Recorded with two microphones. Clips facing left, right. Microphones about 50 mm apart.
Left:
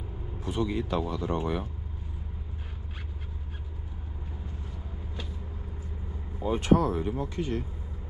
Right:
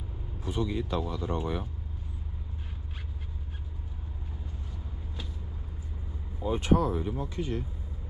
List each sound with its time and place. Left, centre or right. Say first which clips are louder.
0.5 s speech: left 2 dB; left
1.4 s speech: left 2 dB; left
6.7 s speech: left 3 dB; left